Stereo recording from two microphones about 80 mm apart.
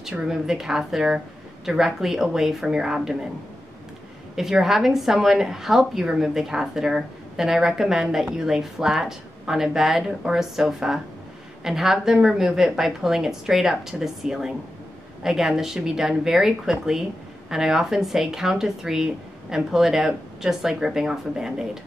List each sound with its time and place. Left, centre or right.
0.0 s a woman's voice: centre
4.4 s a woman's voice: centre